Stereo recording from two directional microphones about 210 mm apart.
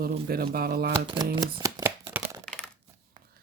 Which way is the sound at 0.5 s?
45° right (ahead or behind).